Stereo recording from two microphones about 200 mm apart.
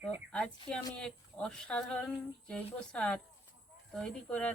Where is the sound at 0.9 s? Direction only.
5° left (ahead or behind).